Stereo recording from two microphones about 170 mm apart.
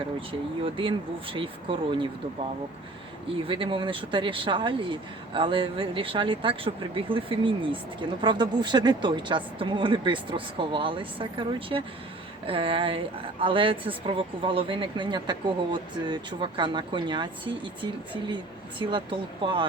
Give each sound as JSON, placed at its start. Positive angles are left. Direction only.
{"t": 0.3, "sound": "speech", "side_deg": -30}
{"t": 3.4, "sound": "a woman's voice", "side_deg": -30}
{"t": 18.8, "sound": "a woman's voice", "side_deg": -30}